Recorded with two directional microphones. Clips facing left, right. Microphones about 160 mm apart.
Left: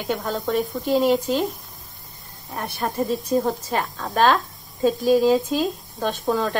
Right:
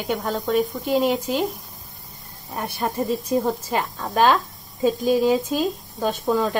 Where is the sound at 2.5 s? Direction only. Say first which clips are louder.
Right 1 dB; 10° right (ahead or behind).